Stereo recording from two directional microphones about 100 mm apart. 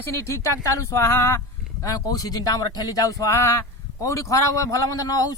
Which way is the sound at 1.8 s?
35° left (ahead or behind).